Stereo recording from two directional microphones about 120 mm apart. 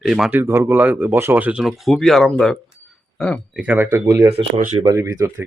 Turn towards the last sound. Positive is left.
turn(degrees=-25)  # may be behind; listen again after turning